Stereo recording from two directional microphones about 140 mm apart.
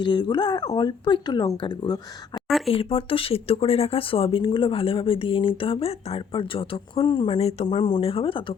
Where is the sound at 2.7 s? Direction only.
40° left (ahead or behind).